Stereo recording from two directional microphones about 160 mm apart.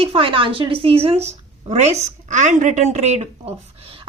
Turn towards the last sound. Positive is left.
turn(degrees=-35)  # may be behind; listen again after turning